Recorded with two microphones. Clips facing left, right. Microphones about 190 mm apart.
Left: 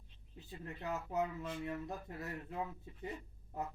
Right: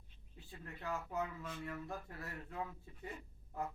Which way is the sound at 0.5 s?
20° left (ahead or behind).